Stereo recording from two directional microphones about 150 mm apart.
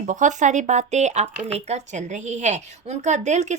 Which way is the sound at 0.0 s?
55° right (ahead or behind).